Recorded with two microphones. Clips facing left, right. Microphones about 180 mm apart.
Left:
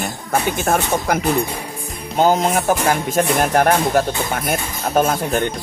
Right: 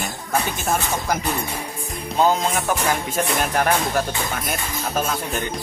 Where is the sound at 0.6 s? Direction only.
60° left (ahead or behind).